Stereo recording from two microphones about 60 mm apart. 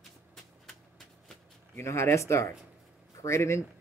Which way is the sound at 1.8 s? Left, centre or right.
Left.